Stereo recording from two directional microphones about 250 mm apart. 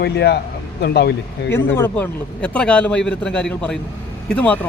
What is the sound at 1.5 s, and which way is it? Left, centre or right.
Speech, centre.